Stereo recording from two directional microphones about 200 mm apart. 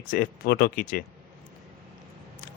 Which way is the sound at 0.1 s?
45° left (ahead or behind).